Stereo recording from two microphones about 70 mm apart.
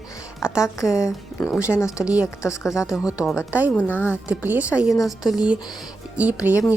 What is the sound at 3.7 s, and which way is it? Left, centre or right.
Speech, left.